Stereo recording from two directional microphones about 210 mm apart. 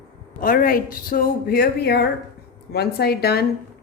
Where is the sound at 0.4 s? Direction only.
40° left (ahead or behind).